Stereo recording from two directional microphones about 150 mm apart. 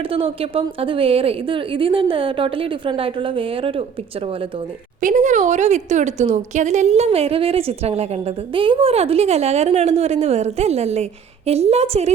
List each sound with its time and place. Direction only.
0.1 s a woman's voice: 40° right (ahead or behind)
4.9 s a woman's voice: 60° right (ahead or behind)